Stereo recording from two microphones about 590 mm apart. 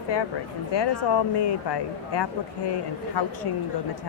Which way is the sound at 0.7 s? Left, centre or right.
Left.